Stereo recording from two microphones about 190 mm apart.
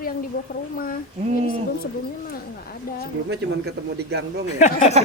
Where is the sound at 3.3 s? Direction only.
60° right (ahead or behind).